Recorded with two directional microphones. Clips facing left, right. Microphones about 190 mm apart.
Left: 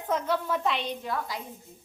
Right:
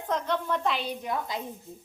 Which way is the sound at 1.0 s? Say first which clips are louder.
Right 1 dB; 20° right (ahead or behind).